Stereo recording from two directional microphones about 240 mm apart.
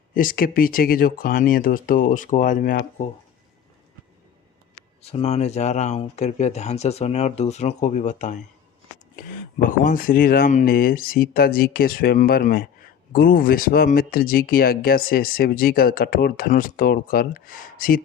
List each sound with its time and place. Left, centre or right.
0.1 s speech: left
4.7 s speech: left